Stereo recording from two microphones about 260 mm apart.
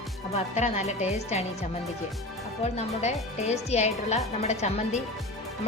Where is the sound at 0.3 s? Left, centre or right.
Left.